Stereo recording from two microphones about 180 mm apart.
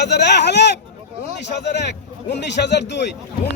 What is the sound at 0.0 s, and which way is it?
Speech, 70° left (ahead or behind).